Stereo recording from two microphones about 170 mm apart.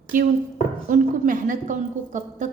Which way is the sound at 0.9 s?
50° right (ahead or behind).